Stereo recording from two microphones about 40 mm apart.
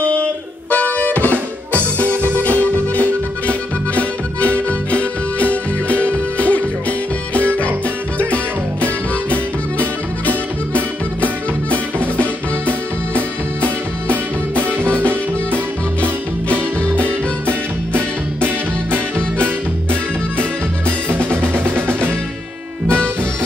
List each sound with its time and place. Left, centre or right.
0.7 s music: left
1.8 s music: right
2.3 s music: left
9.8 s music: left
11.2 s music: right
14.8 s music: right
17.0 s music: right
18.9 s music: left
21.1 s drum: right